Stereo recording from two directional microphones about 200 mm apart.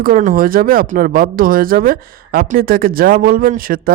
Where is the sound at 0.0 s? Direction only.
40° right (ahead or behind).